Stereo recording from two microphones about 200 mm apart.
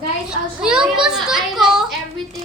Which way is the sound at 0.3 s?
5° right (ahead or behind).